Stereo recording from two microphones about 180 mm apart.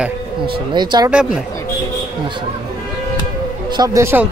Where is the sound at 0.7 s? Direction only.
25° right (ahead or behind).